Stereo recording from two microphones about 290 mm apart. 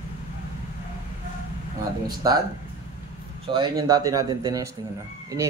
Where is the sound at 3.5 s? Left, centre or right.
Centre.